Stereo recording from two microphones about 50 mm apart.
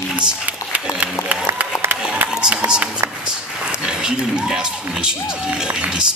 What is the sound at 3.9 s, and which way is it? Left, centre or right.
Speech, centre.